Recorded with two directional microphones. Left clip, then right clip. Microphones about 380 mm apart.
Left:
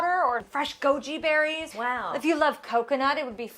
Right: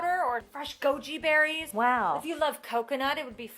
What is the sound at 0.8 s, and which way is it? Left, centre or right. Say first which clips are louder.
Speech: left 1 dB; centre.